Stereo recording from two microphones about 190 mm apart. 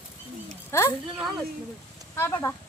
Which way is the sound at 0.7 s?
15° left (ahead or behind).